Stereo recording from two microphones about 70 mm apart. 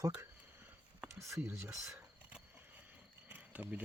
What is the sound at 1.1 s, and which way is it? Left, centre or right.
Speech, right.